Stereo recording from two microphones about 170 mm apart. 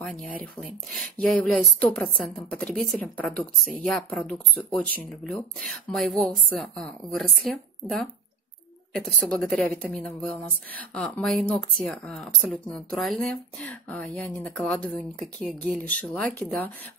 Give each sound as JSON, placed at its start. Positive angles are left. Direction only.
{"t": 0.0, "sound": "speech", "side_deg": 5}
{"t": 8.9, "sound": "speech", "side_deg": 5}